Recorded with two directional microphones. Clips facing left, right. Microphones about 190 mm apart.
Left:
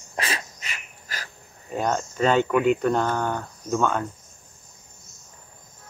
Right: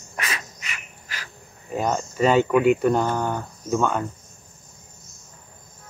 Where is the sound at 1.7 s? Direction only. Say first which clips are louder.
Right 1 dB; 5° right (ahead or behind).